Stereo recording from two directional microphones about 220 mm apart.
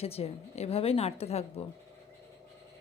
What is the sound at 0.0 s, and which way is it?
A woman's voice, 25° left (ahead or behind).